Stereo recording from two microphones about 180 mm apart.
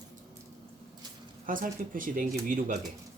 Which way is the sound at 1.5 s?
50° right (ahead or behind).